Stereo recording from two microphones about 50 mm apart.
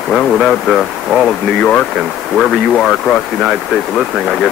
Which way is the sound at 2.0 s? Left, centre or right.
Centre.